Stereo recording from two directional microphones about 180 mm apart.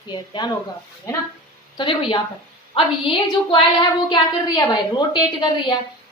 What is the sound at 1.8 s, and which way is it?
A woman's voice, 30° left (ahead or behind).